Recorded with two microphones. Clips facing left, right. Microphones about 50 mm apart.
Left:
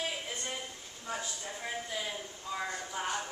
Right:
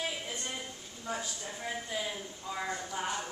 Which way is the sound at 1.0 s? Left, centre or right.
Centre.